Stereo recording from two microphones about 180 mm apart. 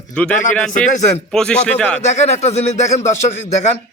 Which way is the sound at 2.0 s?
40° left (ahead or behind).